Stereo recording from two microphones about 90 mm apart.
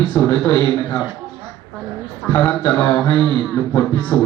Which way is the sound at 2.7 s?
30° left (ahead or behind).